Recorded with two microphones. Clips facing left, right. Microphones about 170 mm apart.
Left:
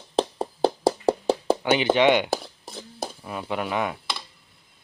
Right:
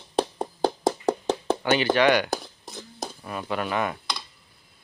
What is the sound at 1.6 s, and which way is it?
Speech, 15° left (ahead or behind).